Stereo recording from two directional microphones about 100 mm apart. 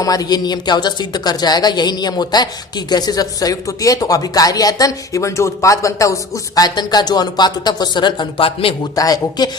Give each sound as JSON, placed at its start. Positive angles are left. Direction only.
{"t": 0.0, "sound": "speech", "side_deg": 40}
{"t": 9.0, "sound": "speech", "side_deg": 40}